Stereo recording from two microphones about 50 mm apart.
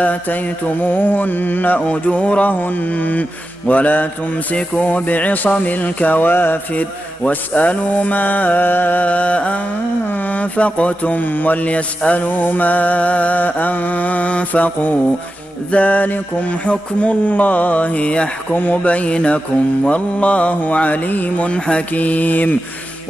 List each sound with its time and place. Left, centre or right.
0.0 s speech: left
1.8 s speech: left
6.7 s speech: left
10.0 s speech: left
16.6 s mantra: left
18.5 s speech: left
18.8 s mantra: left
21.9 s speech: left